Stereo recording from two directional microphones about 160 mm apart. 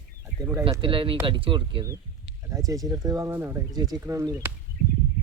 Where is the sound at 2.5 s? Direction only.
20° right (ahead or behind).